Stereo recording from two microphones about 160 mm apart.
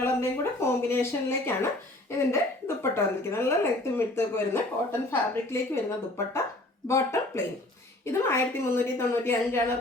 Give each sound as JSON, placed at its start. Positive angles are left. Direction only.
{"t": 0.0, "sound": "speech", "side_deg": 15}